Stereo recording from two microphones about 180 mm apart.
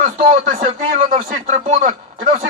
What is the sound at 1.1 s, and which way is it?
A man's voice, 45° right (ahead or behind).